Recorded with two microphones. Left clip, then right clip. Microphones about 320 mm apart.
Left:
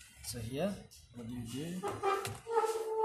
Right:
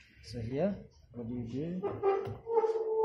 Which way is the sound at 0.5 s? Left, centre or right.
Left.